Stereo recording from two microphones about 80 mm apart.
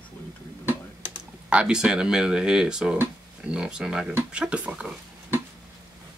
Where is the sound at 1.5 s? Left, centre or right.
Centre.